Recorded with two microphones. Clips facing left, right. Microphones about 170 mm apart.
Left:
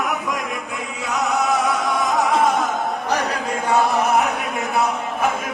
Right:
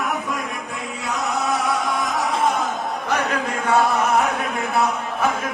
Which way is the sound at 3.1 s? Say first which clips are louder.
Right 2 dB; 35° left (ahead or behind).